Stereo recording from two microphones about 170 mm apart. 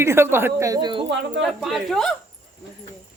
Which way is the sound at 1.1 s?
90° right.